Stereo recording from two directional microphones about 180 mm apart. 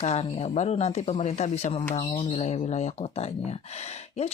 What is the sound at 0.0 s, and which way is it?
Speech, 35° left (ahead or behind).